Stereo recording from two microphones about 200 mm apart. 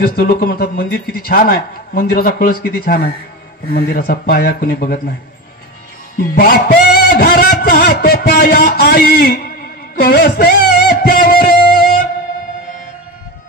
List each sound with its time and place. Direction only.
0.0 s a man's voice: 50° left (ahead or behind)
6.3 s music: 50° left (ahead or behind)